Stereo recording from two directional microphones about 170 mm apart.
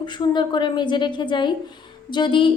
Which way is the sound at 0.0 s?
25° left (ahead or behind).